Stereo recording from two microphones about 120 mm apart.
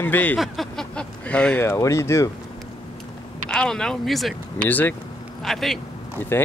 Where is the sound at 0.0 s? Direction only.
15° left (ahead or behind).